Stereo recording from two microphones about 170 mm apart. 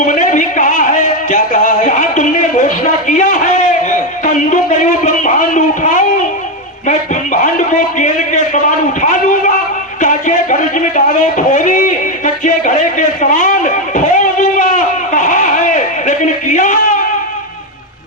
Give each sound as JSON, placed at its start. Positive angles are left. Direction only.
{"t": 0.0, "sound": "music", "side_deg": 50}
{"t": 7.4, "sound": "a sound", "side_deg": 50}
{"t": 13.3, "sound": "music", "side_deg": 50}